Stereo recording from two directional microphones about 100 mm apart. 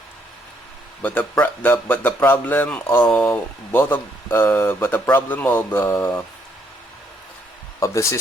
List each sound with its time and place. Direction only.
1.0 s speech: 15° left (ahead or behind)
7.8 s speech: 30° left (ahead or behind)